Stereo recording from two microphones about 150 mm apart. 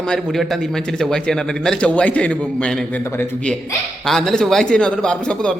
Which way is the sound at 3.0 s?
15° left (ahead or behind).